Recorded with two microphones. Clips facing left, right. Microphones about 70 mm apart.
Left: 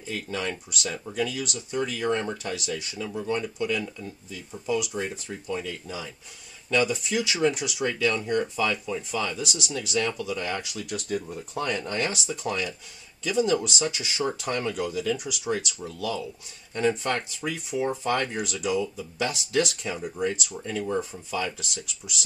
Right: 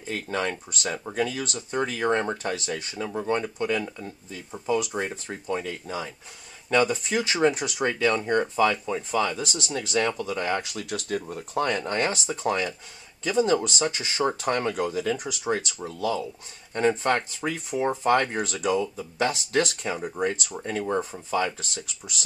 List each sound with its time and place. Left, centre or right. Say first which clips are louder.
0.1 s speech: right 3 dB; right
10.8 s speech: right 1 dB; right
12.1 s speech: right 4 dB; right
18.3 s speech: right 2 dB; right
21.5 s speech: right 1 dB; right